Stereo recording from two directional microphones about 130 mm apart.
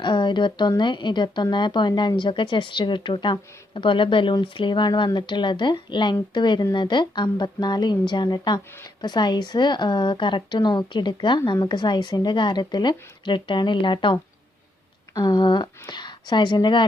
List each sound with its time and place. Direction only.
0.0 s a woman's voice: 35° left (ahead or behind)